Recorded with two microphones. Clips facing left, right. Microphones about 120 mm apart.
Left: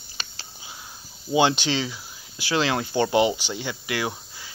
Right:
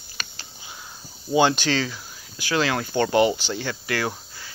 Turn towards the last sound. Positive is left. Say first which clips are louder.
# right 1 dB
turn(degrees=15)  # may be behind; listen again after turning